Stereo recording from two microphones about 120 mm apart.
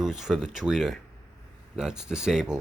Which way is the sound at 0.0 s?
5° right (ahead or behind).